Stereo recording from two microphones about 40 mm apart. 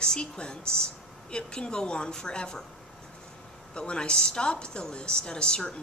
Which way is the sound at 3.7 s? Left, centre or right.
Left.